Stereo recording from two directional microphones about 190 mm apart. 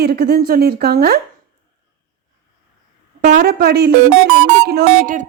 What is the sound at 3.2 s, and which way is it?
A woman's voice, 55° right (ahead or behind).